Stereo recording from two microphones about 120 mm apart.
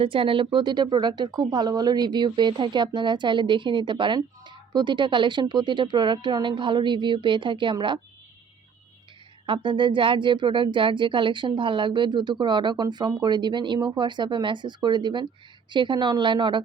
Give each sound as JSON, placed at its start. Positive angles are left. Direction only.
{"t": 0.0, "sound": "speech", "side_deg": -45}
{"t": 9.5, "sound": "speech", "side_deg": -40}